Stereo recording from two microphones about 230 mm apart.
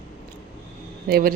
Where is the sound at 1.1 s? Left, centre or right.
Right.